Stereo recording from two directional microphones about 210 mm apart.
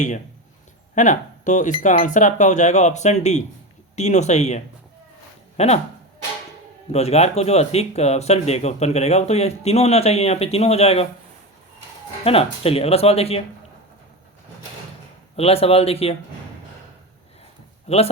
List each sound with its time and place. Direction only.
0.9 s speech: 35° left (ahead or behind)
6.9 s speech: 30° left (ahead or behind)
12.2 s speech: 30° left (ahead or behind)
15.4 s speech: 30° left (ahead or behind)
17.8 s speech: 30° left (ahead or behind)